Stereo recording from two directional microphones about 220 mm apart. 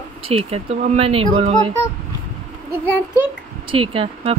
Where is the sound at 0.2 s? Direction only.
25° right (ahead or behind).